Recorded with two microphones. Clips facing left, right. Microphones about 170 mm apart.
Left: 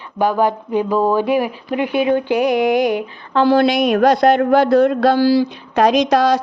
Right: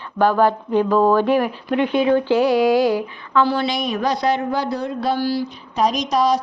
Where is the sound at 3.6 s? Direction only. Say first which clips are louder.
Left 8 dB; 60° left (ahead or behind).